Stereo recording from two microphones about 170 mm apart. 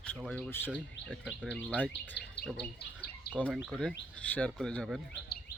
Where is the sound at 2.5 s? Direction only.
75° left (ahead or behind).